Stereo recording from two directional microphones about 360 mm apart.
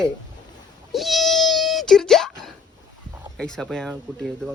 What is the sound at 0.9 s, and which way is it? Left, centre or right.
Wail, centre.